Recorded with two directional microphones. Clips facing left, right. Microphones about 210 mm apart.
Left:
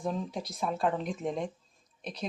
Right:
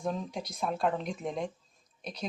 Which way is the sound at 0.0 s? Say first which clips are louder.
Left 1 dB; centre (ahead or behind).